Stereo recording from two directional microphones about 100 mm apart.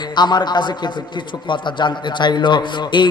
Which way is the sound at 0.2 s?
45° left (ahead or behind).